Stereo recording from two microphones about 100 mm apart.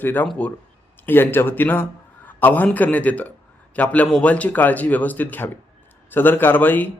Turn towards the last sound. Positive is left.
turn(degrees=20)  # may be behind; listen again after turning